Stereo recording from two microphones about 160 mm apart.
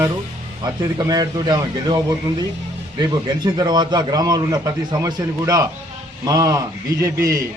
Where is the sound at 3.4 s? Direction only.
25° right (ahead or behind).